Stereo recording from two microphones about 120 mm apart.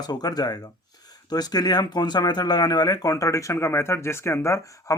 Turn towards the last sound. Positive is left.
turn(degrees=25)  # may be behind; listen again after turning